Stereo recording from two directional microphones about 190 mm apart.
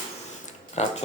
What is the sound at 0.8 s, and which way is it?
Speech, 35° left (ahead or behind).